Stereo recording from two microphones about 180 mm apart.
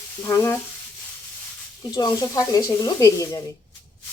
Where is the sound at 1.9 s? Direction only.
20° left (ahead or behind).